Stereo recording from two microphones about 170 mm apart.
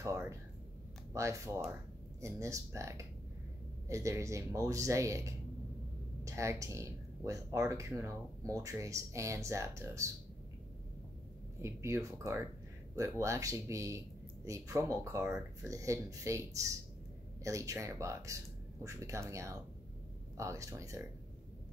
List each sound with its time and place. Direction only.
0.0 s speech: 15° right (ahead or behind)
11.6 s speech: 15° right (ahead or behind)